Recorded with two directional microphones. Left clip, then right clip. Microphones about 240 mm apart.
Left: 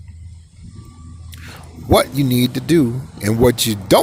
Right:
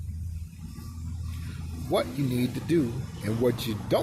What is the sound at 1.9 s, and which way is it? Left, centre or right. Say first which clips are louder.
Speech: left 13 dB; left.